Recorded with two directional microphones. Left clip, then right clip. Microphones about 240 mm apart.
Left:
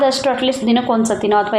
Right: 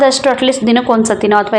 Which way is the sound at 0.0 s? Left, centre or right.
Right.